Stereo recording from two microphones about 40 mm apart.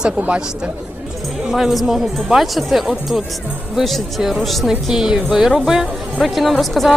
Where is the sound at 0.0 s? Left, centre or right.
Right.